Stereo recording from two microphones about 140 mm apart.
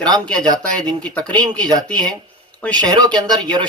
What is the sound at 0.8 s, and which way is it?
Speech, 5° left (ahead or behind).